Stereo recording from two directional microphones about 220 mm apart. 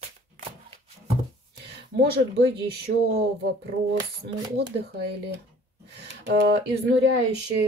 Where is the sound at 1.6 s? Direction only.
50° right (ahead or behind).